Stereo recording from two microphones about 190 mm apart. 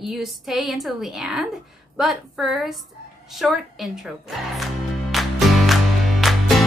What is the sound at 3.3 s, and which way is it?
Music, centre (ahead or behind).